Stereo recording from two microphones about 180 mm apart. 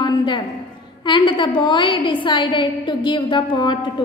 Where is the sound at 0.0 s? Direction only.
25° left (ahead or behind).